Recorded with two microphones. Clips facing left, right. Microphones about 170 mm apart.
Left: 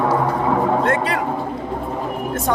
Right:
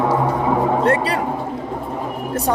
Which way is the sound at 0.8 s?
35° right (ahead or behind).